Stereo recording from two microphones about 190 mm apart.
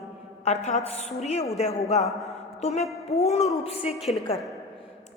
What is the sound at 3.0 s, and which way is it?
Speech, 35° left (ahead or behind).